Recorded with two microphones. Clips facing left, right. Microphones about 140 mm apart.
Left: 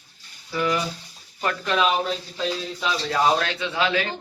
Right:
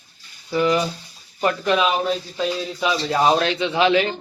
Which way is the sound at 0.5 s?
20° right (ahead or behind).